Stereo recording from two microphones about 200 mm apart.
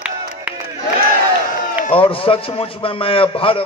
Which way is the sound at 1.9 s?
25° left (ahead or behind).